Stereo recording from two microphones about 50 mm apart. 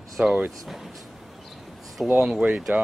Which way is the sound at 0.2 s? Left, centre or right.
Right.